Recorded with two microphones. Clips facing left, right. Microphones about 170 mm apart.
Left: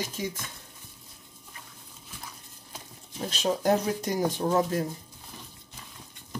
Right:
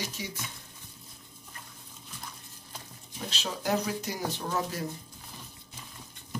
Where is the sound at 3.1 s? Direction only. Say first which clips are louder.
Left 8 dB; 50° left (ahead or behind).